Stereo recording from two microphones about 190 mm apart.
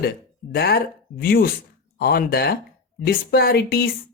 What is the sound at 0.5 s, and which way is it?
Speech, 55° left (ahead or behind).